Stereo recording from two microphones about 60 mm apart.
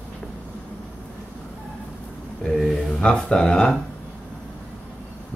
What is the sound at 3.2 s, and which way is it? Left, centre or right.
Speech, centre.